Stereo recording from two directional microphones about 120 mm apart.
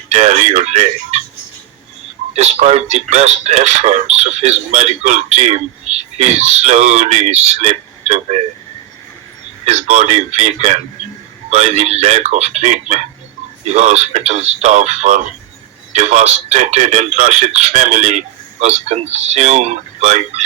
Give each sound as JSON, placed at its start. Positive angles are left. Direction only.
{"t": 0.1, "sound": "speech", "side_deg": -70}
{"t": 2.3, "sound": "speech", "side_deg": -65}
{"t": 9.6, "sound": "speech", "side_deg": -70}